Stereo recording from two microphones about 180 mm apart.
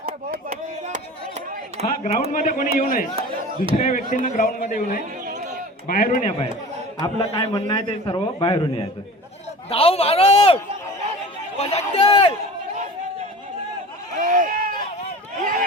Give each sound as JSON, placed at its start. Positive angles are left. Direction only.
{"t": 0.0, "sound": "a sound", "side_deg": -55}
{"t": 1.8, "sound": "a man's voice", "side_deg": -40}
{"t": 2.3, "sound": "speech", "side_deg": 45}
{"t": 7.0, "sound": "a man's voice", "side_deg": 25}
{"t": 9.6, "sound": "speech", "side_deg": 35}
{"t": 14.2, "sound": "a sound", "side_deg": -45}
{"t": 15.4, "sound": "run", "side_deg": -50}